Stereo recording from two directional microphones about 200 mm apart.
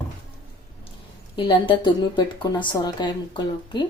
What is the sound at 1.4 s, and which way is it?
A woman's voice, 25° left (ahead or behind).